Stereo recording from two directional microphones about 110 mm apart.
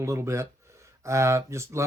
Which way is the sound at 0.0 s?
25° right (ahead or behind).